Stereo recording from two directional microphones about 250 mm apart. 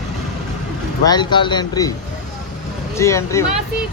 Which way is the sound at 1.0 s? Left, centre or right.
Centre.